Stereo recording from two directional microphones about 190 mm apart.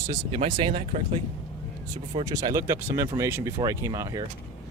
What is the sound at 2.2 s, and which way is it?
Speech, 15° right (ahead or behind).